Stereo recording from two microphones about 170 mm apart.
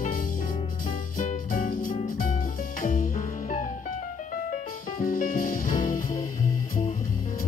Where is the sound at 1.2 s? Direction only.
50° left (ahead or behind).